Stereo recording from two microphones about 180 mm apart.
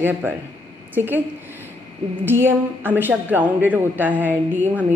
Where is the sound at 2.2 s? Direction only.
10° right (ahead or behind).